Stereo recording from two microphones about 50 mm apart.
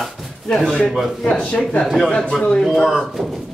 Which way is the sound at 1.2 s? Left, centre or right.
Left.